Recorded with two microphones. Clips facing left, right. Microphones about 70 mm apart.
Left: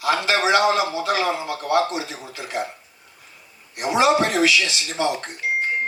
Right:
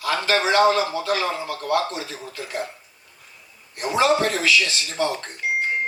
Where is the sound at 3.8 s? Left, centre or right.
Centre.